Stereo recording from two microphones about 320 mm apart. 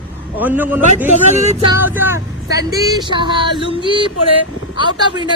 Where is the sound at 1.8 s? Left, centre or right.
Centre.